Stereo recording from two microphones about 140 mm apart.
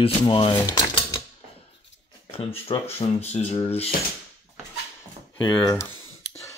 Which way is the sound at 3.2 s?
55° left (ahead or behind).